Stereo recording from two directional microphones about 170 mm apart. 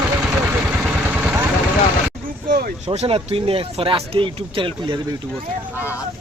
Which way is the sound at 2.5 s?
60° right (ahead or behind).